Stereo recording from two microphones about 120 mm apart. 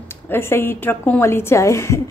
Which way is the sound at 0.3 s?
20° left (ahead or behind).